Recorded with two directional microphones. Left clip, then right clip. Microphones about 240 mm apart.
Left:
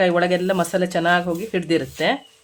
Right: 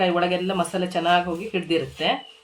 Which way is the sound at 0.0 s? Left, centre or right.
Left.